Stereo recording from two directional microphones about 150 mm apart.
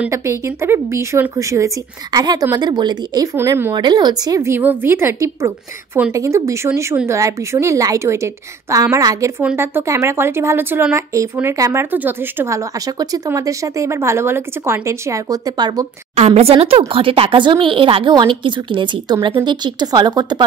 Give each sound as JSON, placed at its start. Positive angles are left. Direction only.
{"t": 0.1, "sound": "a woman's voice", "side_deg": -20}
{"t": 3.3, "sound": "speech", "side_deg": -15}
{"t": 3.7, "sound": "a woman's voice", "side_deg": -30}
{"t": 16.2, "sound": "a woman's voice", "side_deg": -45}